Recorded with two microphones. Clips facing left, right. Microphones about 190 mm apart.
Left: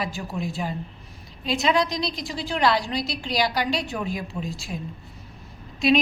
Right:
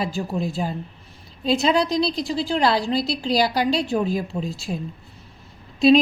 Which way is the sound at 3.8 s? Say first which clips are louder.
Right 7 dB; 35° right (ahead or behind).